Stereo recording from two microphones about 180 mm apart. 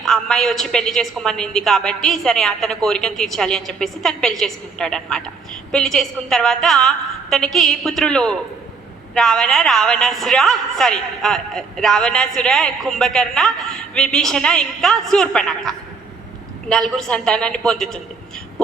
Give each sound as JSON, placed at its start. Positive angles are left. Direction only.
{"t": 0.0, "sound": "a woman's voice", "side_deg": 0}